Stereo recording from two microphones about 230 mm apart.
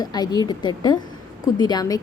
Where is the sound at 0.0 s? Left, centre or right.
Centre.